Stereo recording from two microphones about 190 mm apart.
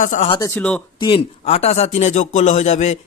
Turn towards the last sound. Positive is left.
turn(degrees=35)  # may be behind; listen again after turning